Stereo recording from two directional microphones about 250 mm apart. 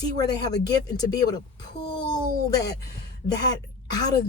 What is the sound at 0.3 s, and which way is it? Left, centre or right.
A woman's voice, centre.